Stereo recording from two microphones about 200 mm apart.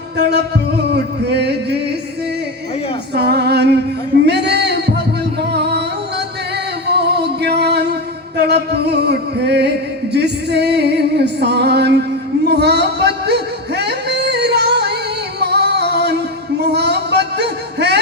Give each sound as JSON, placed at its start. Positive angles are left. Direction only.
{"t": 0.2, "sound": "music", "side_deg": -55}
{"t": 3.2, "sound": "music", "side_deg": -55}
{"t": 4.3, "sound": "a sound", "side_deg": -55}
{"t": 5.5, "sound": "music", "side_deg": -55}
{"t": 12.5, "sound": "a sound", "side_deg": -55}
{"t": 15.4, "sound": "female singing", "side_deg": -55}